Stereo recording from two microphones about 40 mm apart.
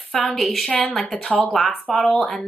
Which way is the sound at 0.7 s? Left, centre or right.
Left.